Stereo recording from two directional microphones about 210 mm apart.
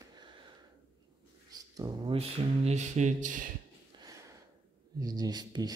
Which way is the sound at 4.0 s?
15° right (ahead or behind).